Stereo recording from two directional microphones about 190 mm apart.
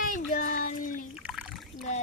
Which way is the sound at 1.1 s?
5° right (ahead or behind).